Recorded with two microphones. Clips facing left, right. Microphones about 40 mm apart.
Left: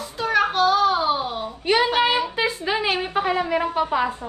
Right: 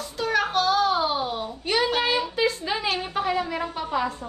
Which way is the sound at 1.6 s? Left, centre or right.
Left.